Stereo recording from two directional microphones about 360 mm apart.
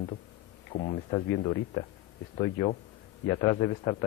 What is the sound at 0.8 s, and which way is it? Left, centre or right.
A man's voice, centre.